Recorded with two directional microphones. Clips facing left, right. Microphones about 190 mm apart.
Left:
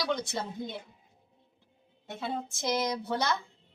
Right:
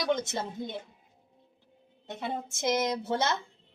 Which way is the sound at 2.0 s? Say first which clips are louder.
Even; 20° right (ahead or behind).